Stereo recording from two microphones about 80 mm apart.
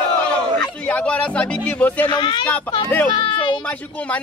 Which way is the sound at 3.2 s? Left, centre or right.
Left.